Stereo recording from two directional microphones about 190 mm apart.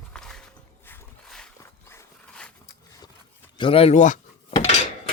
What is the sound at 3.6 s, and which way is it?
Speech, 30° left (ahead or behind).